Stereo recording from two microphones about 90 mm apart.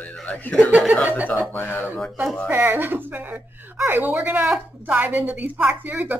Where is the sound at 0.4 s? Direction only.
15° left (ahead or behind).